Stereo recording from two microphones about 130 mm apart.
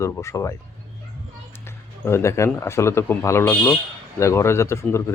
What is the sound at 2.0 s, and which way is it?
Speech, 20° left (ahead or behind).